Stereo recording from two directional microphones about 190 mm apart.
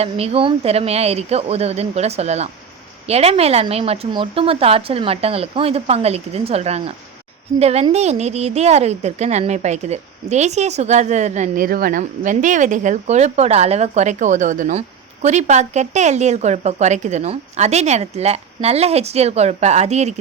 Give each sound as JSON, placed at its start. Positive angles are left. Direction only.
{"t": 0.0, "sound": "a woman's voice", "side_deg": -30}